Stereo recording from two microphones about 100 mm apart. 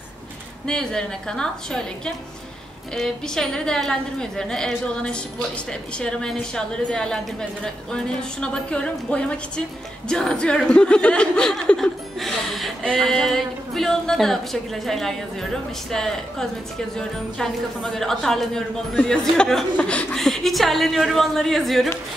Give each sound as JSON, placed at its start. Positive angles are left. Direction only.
{"t": 0.7, "sound": "a woman's voice", "side_deg": 5}